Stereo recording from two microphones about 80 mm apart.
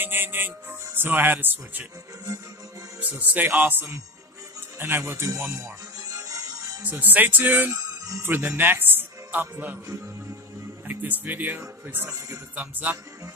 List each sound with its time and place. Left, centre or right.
0.0 s speech: right
3.0 s speech: right
5.3 s music: right
6.8 s speech: right
7.7 s speech: right
8.2 s speech: right
9.8 s speech: right
10.9 s speech: right